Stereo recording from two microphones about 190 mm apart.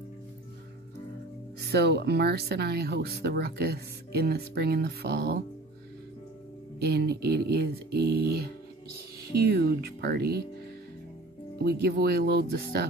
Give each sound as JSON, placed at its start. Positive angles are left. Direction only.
{"t": 1.6, "sound": "speech", "side_deg": -60}
{"t": 6.8, "sound": "speech", "side_deg": -55}
{"t": 11.6, "sound": "speech", "side_deg": -55}